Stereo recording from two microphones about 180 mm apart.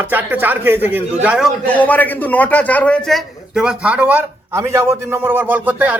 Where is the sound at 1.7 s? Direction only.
10° left (ahead or behind); by 5.9 s 10° right (ahead or behind).